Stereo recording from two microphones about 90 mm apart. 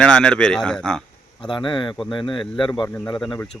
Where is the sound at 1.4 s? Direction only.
65° left (ahead or behind).